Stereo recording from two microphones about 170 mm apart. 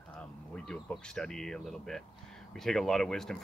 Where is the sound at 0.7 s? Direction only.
5° left (ahead or behind).